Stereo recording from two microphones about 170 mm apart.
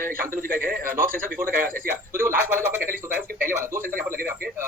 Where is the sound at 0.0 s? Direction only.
55° right (ahead or behind).